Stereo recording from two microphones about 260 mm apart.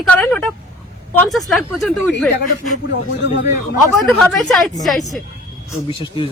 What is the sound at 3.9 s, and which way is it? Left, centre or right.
Speech, centre.